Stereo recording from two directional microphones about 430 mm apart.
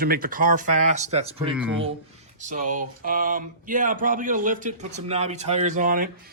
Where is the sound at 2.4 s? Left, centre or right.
Centre.